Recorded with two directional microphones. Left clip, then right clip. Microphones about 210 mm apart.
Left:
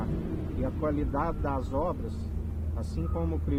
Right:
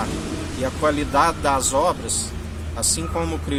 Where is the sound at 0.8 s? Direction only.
15° right (ahead or behind).